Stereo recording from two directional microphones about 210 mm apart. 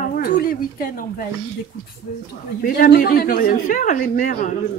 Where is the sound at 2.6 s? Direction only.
45° left (ahead or behind).